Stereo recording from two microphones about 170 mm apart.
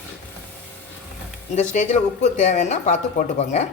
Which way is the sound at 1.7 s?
45° left (ahead or behind).